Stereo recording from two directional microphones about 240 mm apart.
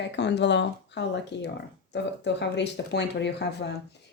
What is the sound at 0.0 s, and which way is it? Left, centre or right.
A woman's voice, left.